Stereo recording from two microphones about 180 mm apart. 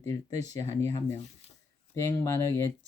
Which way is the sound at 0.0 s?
20° left (ahead or behind).